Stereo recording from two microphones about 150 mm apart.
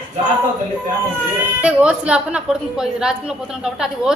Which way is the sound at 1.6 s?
10° right (ahead or behind).